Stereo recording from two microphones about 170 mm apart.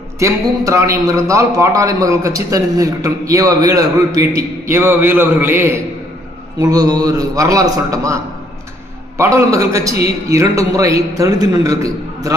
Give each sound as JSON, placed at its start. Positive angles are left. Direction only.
{"t": 0.2, "sound": "a man's voice", "side_deg": -15}